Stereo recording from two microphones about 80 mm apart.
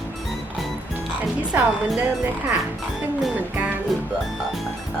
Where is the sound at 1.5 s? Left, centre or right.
Right.